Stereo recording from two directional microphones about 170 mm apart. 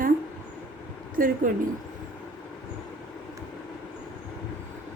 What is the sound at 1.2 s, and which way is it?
Speech, 55° right (ahead or behind).